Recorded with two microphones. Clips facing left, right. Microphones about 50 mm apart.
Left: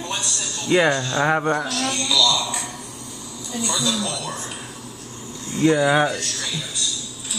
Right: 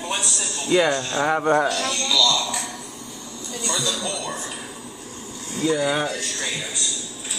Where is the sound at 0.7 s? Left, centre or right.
Left.